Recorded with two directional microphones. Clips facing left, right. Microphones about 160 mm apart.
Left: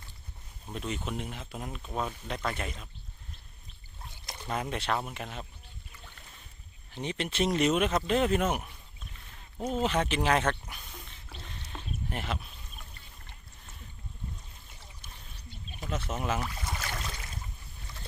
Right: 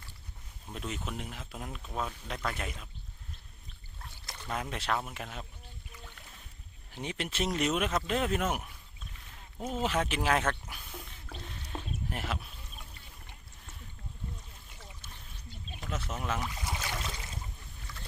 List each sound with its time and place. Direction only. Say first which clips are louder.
0.7 s speech: left 3 dB; centre (ahead or behind)
4.4 s speech: left 2 dB; centre (ahead or behind)
6.9 s speech: left 3 dB; 5° right (ahead or behind)
9.6 s speech: left 3 dB; 5° right (ahead or behind)
11.7 s a sound: left 1 dB; 5° right (ahead or behind)
15.8 s speech: left 4 dB; centre (ahead or behind)
16.5 s boat: even; 15° right (ahead or behind)